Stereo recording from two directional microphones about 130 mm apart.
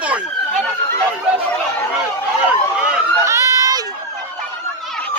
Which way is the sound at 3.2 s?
25° right (ahead or behind).